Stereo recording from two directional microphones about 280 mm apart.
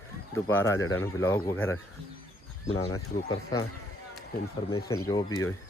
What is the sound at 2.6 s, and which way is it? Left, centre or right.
Speech, left.